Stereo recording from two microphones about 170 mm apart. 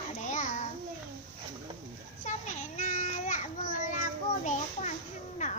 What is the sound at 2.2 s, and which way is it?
Children playing, 45° left (ahead or behind).